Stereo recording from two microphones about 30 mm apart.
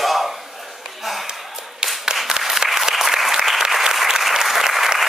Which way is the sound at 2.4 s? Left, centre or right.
Right.